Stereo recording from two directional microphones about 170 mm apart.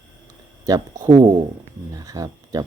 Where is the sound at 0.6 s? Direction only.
20° right (ahead or behind).